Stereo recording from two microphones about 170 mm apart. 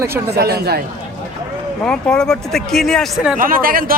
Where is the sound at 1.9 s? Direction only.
5° left (ahead or behind).